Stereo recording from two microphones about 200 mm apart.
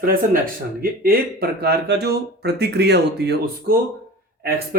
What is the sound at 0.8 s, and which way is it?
Speech, 45° right (ahead or behind).